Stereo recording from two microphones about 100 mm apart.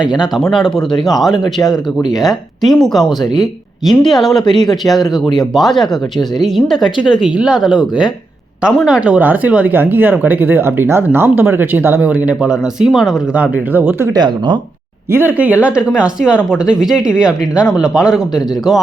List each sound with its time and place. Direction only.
0.0 s speech: 5° right (ahead or behind)
7.7 s speech: 50° left (ahead or behind)
8.9 s speech: 10° right (ahead or behind)
13.3 s speech: 15° right (ahead or behind)
14.1 s speech: 45° right (ahead or behind)
15.1 s speech: 20° right (ahead or behind); by 18.8 s 5° right (ahead or behind)